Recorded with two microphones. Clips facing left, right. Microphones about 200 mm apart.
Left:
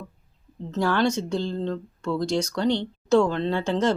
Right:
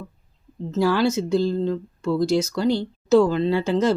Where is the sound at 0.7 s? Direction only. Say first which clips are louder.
Right 3 dB; 5° right (ahead or behind).